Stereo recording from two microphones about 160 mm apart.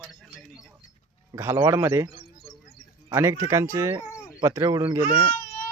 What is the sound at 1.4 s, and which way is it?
Speech, 15° right (ahead or behind).